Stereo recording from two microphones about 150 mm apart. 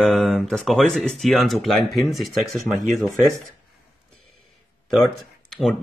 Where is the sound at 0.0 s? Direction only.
Centre (ahead or behind).